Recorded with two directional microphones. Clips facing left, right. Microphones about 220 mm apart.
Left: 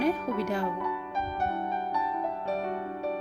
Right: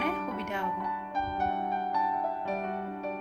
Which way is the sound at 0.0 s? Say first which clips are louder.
Left 5 dB; 35° left (ahead or behind).